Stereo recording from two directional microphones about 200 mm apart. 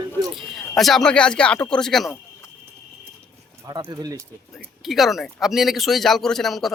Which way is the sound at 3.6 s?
20° right (ahead or behind).